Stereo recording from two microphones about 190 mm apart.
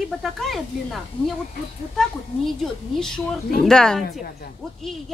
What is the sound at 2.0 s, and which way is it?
A woman's voice, centre (ahead or behind).